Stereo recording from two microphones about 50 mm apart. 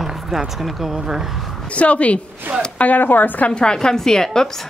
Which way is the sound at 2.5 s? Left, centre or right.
Right.